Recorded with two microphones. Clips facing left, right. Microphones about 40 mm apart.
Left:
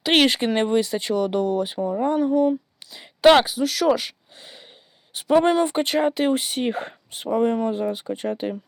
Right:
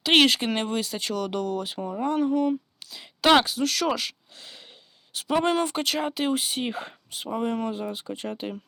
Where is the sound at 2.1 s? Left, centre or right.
Centre.